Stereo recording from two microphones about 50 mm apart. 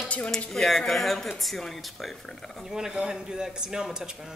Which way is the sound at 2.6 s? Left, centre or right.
Centre.